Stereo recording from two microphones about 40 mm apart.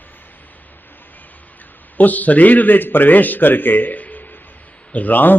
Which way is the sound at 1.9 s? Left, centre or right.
Left.